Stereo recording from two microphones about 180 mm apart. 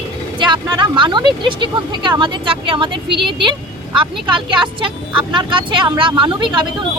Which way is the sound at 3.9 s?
30° right (ahead or behind).